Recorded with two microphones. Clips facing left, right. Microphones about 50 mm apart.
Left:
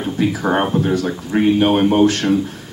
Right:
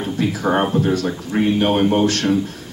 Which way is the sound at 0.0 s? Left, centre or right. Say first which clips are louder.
Left 2 dB; centre.